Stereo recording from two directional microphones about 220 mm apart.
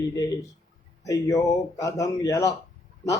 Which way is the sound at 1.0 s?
15° left (ahead or behind).